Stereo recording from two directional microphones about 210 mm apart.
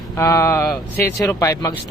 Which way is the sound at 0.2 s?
15° left (ahead or behind).